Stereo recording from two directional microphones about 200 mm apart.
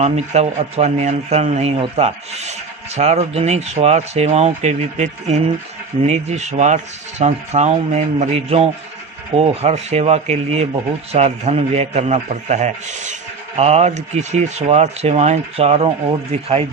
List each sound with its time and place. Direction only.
0.0 s speech: 35° right (ahead or behind)